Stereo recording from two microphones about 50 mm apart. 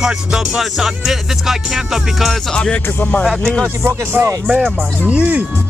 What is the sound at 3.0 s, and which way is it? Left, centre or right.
Speech, left.